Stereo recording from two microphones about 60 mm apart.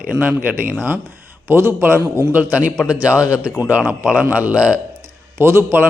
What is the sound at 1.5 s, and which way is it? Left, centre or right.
Speech, right.